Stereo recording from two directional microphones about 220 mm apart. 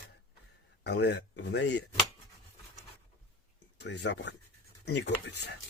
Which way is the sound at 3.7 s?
50° left (ahead or behind).